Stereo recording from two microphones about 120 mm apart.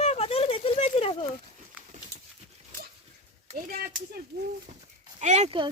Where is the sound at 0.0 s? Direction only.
60° left (ahead or behind).